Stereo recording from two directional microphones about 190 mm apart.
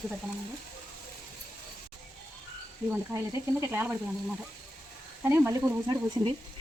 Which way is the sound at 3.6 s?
10° right (ahead or behind).